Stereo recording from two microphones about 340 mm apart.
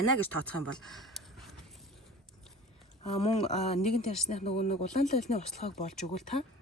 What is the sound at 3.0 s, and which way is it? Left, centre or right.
Speech, centre.